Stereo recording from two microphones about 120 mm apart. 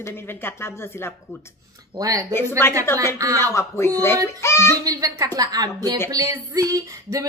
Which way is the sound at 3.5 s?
25° left (ahead or behind).